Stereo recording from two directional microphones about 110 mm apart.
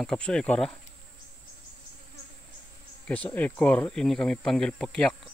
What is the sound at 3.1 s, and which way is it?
Speech, 15° left (ahead or behind).